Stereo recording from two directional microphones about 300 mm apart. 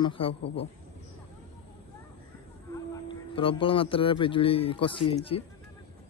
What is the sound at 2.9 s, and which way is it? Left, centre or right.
Speech, centre.